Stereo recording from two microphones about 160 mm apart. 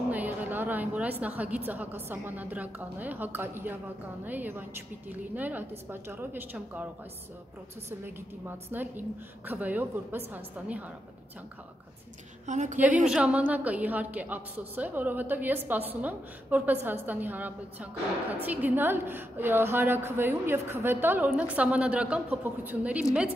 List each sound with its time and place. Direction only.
0.1 s a woman's voice: 10° right (ahead or behind)
8.0 s a woman's voice: 15° right (ahead or behind)
12.4 s a woman's voice: 50° right (ahead or behind)
12.7 s a woman's voice: 10° right (ahead or behind)